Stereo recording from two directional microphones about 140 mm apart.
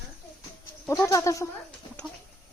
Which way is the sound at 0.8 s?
20° left (ahead or behind).